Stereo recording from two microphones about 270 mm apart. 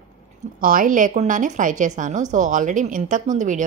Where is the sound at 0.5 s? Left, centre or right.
Right.